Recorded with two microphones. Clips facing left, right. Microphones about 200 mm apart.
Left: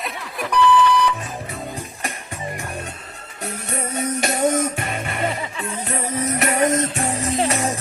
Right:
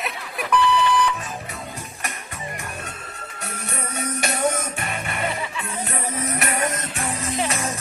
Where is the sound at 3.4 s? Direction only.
30° left (ahead or behind).